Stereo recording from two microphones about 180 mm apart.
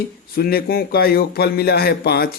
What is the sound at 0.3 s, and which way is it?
A man's voice, 60° left (ahead or behind).